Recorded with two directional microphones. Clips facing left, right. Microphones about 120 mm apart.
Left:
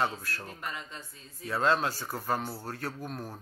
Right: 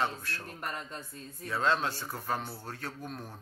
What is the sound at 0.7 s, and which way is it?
Speech, 50° right (ahead or behind).